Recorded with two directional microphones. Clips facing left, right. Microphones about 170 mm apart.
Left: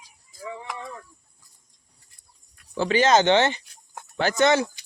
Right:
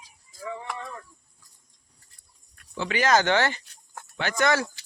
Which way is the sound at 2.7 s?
30° left (ahead or behind).